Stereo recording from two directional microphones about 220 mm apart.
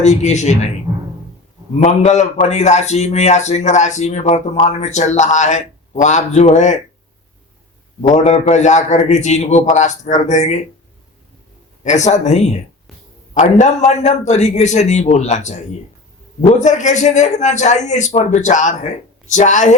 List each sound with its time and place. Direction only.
0.0 s a man's voice: 30° left (ahead or behind)
1.8 s a man's voice: 30° left (ahead or behind)
8.0 s a man's voice: 35° left (ahead or behind)
11.8 s a man's voice: 35° left (ahead or behind)
16.6 s a man's voice: 35° left (ahead or behind)